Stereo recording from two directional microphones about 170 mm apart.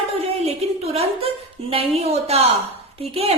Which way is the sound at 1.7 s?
35° right (ahead or behind).